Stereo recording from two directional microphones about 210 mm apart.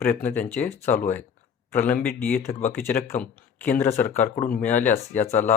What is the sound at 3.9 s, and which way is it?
Speech, 35° left (ahead or behind).